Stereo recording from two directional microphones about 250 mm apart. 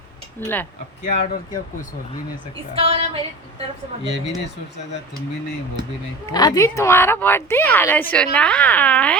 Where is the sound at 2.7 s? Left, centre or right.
Right.